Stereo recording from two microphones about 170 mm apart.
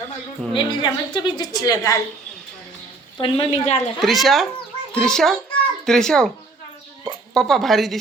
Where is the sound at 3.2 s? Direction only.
30° left (ahead or behind).